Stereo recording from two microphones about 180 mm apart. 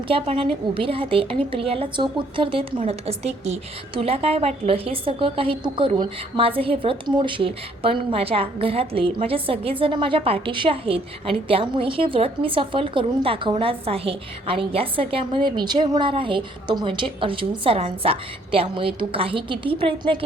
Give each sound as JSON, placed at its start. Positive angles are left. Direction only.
{"t": 0.1, "sound": "a woman's voice", "side_deg": -30}